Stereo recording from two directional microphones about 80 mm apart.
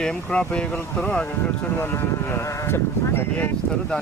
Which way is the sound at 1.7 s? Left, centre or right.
Left.